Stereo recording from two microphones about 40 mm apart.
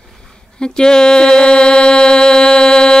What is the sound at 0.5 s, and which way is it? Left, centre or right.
Mantra, centre.